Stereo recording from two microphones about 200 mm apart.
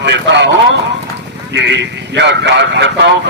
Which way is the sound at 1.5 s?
60° right (ahead or behind).